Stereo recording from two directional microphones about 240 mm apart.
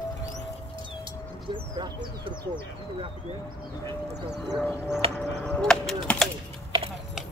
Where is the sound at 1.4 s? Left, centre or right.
Centre.